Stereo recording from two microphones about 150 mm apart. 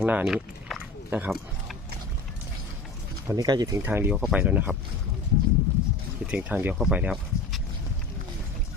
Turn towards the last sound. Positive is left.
turn(degrees=-5)  # may be behind; listen again after turning